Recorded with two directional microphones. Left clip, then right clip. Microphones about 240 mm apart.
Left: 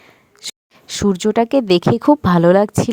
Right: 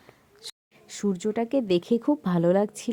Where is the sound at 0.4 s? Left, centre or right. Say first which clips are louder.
Left 12 dB; left.